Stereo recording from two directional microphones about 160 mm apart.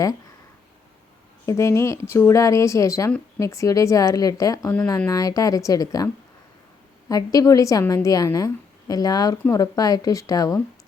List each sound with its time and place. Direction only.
1.5 s a woman's voice: 20° left (ahead or behind)
7.1 s a woman's voice: 20° left (ahead or behind)